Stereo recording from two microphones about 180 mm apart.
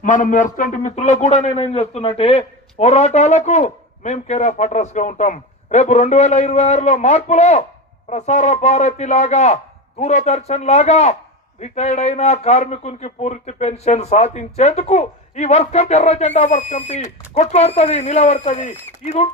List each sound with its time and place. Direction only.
0.0 s a man's voice: 45° left (ahead or behind)